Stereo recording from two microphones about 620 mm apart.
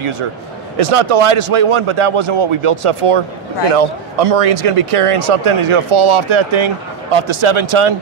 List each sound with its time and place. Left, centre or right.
0.9 s speech: right